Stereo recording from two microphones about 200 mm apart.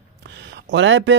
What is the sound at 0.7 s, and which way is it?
Speech, 70° right (ahead or behind).